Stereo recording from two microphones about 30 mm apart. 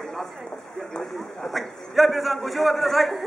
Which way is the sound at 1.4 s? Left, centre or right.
Centre.